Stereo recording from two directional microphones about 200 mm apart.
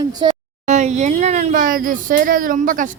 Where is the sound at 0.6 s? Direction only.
35° right (ahead or behind).